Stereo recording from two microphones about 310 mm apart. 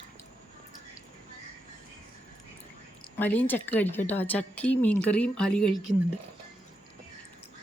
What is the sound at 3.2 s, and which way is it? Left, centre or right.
A woman's voice, centre.